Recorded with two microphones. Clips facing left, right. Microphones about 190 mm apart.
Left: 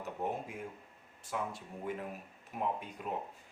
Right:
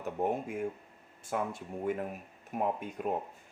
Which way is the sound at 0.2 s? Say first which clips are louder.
Right 7 dB; 45° right (ahead or behind).